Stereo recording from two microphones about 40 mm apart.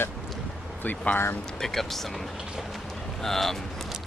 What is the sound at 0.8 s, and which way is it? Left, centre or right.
Speech, left.